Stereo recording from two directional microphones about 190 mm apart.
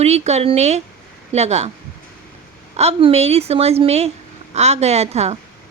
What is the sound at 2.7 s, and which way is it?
Speech, 35° right (ahead or behind).